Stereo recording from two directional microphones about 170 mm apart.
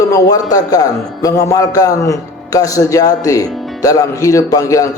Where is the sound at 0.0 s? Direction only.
20° left (ahead or behind).